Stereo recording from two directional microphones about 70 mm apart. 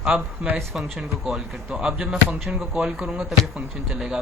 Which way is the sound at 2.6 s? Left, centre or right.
Centre.